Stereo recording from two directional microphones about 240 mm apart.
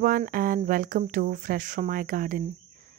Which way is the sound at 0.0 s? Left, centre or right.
Right.